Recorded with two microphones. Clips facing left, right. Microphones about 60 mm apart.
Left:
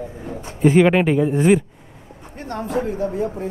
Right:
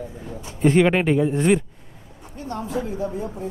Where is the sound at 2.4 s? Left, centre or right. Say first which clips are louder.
Left 4 dB; left.